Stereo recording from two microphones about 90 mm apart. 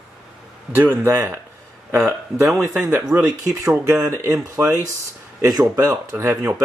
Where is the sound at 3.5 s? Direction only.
30° right (ahead or behind).